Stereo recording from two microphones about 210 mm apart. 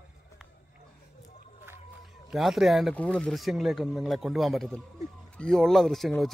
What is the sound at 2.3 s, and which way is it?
Speech, centre (ahead or behind).